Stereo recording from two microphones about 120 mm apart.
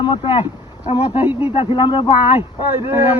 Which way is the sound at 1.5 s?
40° left (ahead or behind).